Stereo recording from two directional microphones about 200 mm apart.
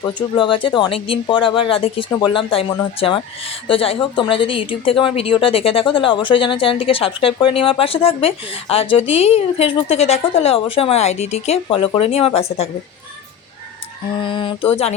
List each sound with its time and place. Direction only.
0.0 s speech: 25° left (ahead or behind)
14.2 s speech: 25° left (ahead or behind)